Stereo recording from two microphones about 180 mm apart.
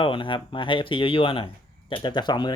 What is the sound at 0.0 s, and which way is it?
Speech, 30° left (ahead or behind).